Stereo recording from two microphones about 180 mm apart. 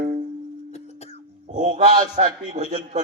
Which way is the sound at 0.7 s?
35° left (ahead or behind).